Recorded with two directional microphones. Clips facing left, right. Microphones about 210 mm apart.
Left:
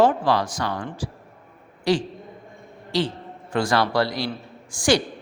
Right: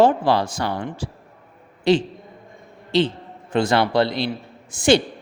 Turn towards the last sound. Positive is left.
turn(degrees=-25)  # may be behind; listen again after turning